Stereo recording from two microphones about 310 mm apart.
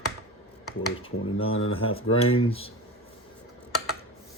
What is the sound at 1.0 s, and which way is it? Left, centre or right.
Speech, centre.